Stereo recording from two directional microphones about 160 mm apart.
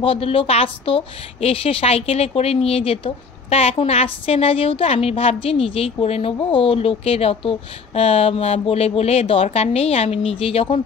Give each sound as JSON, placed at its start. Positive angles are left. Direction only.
{"t": 0.0, "sound": "a woman's voice", "side_deg": 35}